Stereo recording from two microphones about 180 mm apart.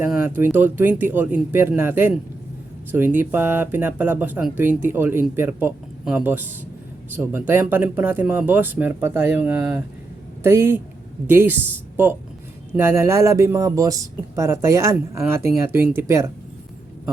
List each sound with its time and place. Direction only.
0.0 s speech: 10° right (ahead or behind)